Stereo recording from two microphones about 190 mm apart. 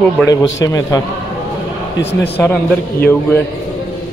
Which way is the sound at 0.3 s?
20° left (ahead or behind).